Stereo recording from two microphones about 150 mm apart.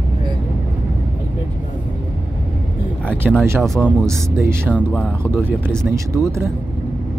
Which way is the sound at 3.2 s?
5° right (ahead or behind).